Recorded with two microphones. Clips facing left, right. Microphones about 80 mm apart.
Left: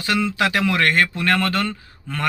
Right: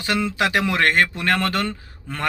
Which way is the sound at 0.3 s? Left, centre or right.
Right.